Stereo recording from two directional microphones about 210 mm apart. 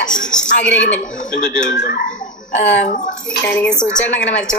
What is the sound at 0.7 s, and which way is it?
Speech, 60° left (ahead or behind).